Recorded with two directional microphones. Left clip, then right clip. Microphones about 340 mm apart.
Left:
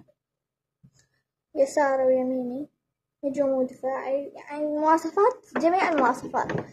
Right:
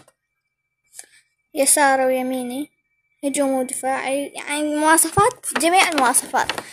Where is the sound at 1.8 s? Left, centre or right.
Right.